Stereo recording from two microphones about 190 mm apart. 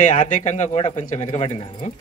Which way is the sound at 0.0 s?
40° left (ahead or behind).